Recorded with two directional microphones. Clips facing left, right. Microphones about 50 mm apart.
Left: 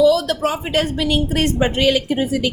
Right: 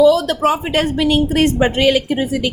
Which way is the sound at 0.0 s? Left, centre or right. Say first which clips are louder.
Right 3 dB; right.